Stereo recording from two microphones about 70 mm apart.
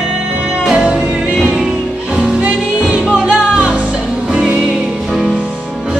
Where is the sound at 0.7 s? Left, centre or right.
Centre.